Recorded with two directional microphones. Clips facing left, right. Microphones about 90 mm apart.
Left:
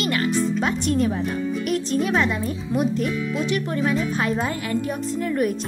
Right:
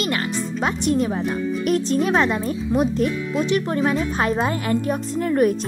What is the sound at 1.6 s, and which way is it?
Speech, 35° right (ahead or behind).